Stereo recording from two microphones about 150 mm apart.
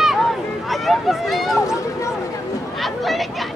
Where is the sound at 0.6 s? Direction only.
Centre (ahead or behind).